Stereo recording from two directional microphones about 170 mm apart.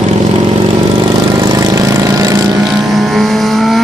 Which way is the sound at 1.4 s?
20° right (ahead or behind).